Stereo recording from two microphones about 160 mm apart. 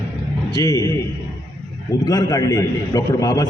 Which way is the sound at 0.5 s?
20° left (ahead or behind).